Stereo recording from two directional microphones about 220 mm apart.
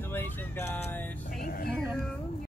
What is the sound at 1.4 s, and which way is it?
Speech, 40° left (ahead or behind).